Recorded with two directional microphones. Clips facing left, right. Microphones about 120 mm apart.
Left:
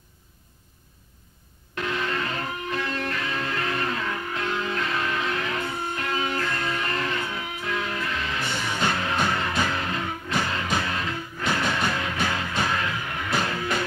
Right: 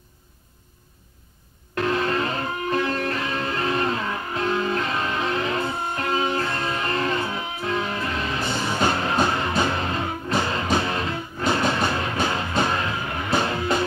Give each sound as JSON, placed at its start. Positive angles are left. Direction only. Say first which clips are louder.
{"t": 1.8, "sound": "music", "louder": "right 5 dB", "side_deg": -40}